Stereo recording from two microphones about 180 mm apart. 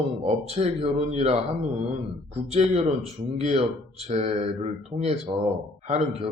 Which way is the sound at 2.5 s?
35° right (ahead or behind).